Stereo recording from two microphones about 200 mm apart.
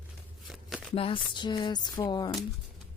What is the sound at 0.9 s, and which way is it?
Speech, 25° left (ahead or behind).